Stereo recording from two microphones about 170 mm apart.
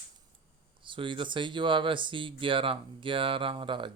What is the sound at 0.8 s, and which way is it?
Speech, 30° right (ahead or behind).